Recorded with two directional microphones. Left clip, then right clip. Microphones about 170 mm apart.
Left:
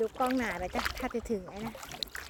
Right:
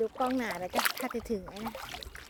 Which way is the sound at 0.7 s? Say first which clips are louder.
Right 4 dB; 55° right (ahead or behind).